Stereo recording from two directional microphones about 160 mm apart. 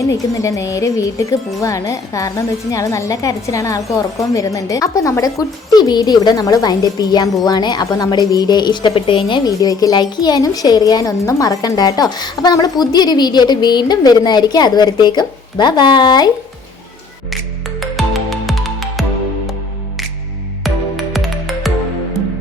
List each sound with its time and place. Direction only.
0.4 s a woman's voice: 20° left (ahead or behind)
17.7 s music: centre (ahead or behind)
20.7 s music: centre (ahead or behind)